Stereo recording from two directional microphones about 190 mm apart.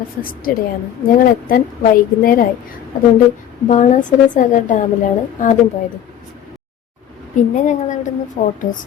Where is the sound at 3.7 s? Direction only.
40° left (ahead or behind).